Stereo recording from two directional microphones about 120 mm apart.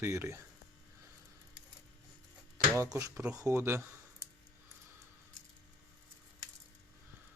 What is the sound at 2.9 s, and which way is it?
Speech, 25° right (ahead or behind).